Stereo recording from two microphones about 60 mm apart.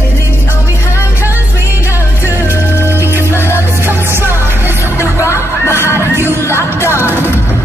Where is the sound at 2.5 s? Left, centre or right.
Right.